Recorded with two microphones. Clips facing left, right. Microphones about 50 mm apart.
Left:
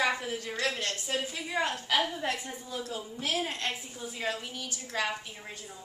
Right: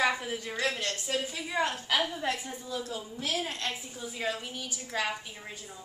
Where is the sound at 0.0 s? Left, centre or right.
Centre.